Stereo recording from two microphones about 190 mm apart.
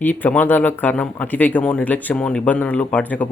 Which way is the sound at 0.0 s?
10° left (ahead or behind).